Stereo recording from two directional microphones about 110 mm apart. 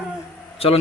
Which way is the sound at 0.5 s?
60° left (ahead or behind).